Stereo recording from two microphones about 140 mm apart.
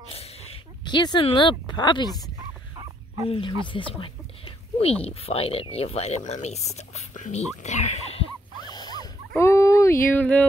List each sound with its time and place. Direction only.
0.1 s a sound: 45° left (ahead or behind)
0.8 s speech: 30° left (ahead or behind)
3.3 s speech: 40° left (ahead or behind)
3.6 s a sound: 35° left (ahead or behind)
5.0 s speech: 45° left (ahead or behind)
8.6 s dog: 30° left (ahead or behind)
9.3 s fowl: 20° left (ahead or behind)